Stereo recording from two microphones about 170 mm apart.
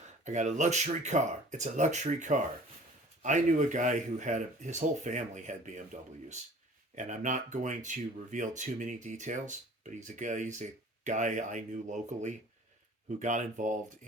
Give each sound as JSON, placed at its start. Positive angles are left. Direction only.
{"t": 0.3, "sound": "speech", "side_deg": -45}